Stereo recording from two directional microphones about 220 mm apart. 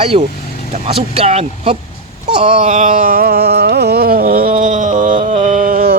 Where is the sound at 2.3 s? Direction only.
35° right (ahead or behind).